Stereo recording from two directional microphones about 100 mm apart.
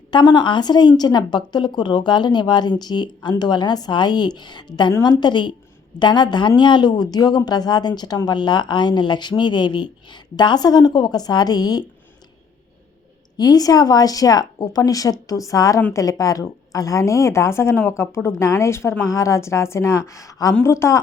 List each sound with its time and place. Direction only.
0.1 s a woman's voice: 50° left (ahead or behind)
13.3 s a woman's voice: 40° left (ahead or behind)